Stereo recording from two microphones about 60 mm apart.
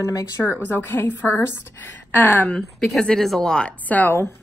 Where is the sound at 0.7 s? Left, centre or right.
Left.